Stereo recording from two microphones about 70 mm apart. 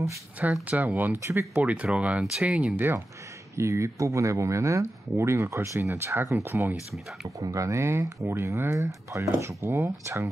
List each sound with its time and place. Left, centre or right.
0.7 s speech: right
1.2 s speech: right
1.6 s speech: centre
3.5 s speech: right
7.2 s speech: right